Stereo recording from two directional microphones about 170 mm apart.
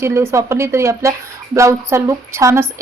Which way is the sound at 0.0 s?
15° right (ahead or behind).